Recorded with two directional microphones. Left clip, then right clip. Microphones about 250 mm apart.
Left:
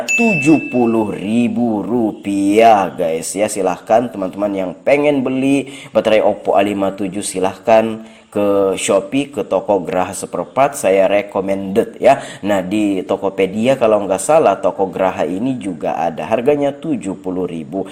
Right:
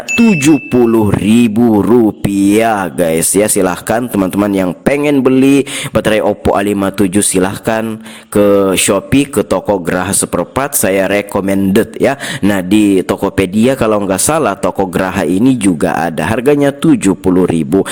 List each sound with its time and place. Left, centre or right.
0.5 s music: right
0.9 s speech: right